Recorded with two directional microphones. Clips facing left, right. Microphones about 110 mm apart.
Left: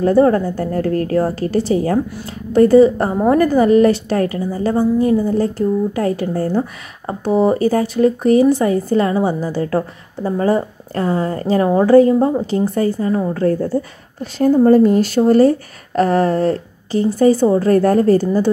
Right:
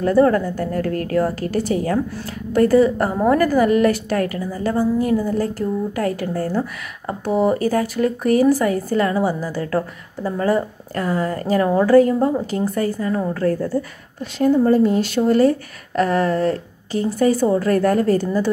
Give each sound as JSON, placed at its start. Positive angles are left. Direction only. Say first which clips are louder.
{"t": 0.0, "sound": "speech", "louder": "left 3 dB", "side_deg": 25}
{"t": 14.2, "sound": "speech", "louder": "left 4 dB", "side_deg": 35}